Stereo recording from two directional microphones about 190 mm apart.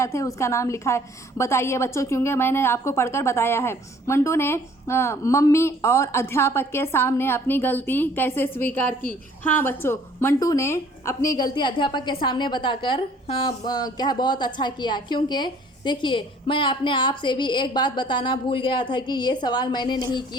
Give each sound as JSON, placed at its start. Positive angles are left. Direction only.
{"t": 0.0, "sound": "a woman's voice", "side_deg": 15}